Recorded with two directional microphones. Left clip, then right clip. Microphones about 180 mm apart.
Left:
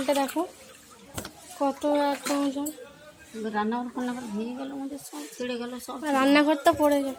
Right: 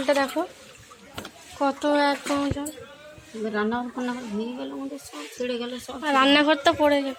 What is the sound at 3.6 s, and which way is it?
Speech, 45° right (ahead or behind).